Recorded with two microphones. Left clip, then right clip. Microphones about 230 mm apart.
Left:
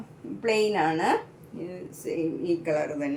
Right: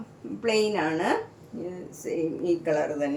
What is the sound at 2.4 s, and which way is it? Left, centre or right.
Speech, centre.